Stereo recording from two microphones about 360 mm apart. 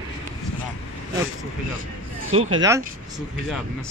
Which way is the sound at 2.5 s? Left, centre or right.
Centre.